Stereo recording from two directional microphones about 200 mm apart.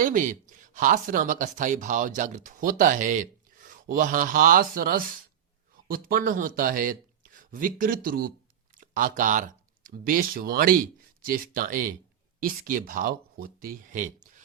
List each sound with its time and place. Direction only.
0.0 s speech: 40° right (ahead or behind)